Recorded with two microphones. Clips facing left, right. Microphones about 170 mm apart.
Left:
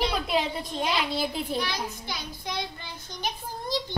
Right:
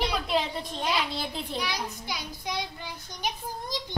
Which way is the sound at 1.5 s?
15° right (ahead or behind).